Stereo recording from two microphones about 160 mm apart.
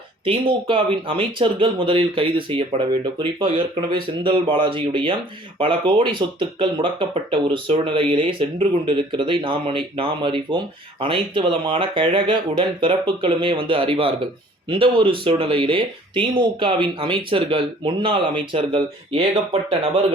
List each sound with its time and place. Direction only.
0.3 s speech: 30° right (ahead or behind)